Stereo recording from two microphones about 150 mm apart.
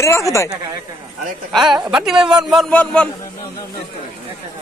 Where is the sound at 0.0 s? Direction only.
20° left (ahead or behind).